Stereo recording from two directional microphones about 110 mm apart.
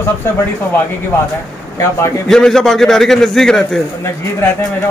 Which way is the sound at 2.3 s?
5° left (ahead or behind).